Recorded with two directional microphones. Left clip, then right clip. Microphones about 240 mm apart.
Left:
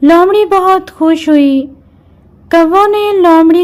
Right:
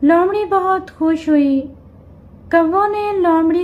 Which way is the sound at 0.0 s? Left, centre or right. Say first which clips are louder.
Left 7 dB; left.